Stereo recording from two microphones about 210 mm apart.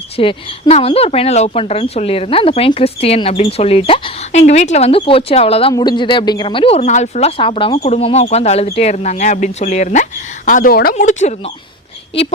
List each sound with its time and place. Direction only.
0.2 s speech: 25° left (ahead or behind)